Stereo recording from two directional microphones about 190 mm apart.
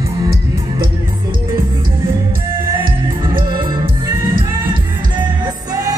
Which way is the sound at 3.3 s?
25° right (ahead or behind).